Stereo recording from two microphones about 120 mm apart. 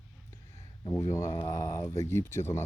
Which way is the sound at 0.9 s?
20° left (ahead or behind).